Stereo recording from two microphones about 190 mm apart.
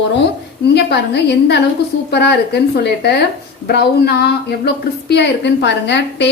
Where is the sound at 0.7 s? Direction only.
60° left (ahead or behind).